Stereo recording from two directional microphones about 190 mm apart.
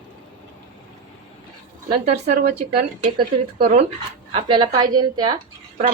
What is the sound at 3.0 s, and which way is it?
A woman's voice, 30° right (ahead or behind).